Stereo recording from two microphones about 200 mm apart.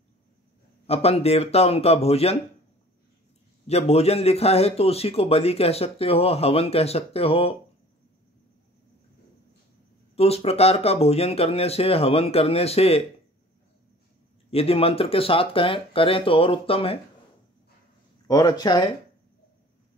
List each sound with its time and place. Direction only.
0.8 s a man's voice: 30° left (ahead or behind)
3.6 s a man's voice: 30° left (ahead or behind)
10.1 s speech: 30° left (ahead or behind)
14.5 s speech: 30° left (ahead or behind)
18.2 s speech: 20° left (ahead or behind)